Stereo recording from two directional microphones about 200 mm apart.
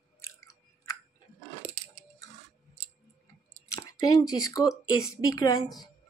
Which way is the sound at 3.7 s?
20° left (ahead or behind).